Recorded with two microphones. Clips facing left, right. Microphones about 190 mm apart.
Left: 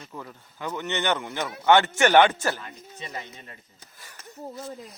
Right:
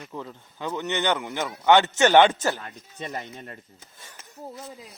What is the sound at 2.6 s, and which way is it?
Speech, 50° right (ahead or behind).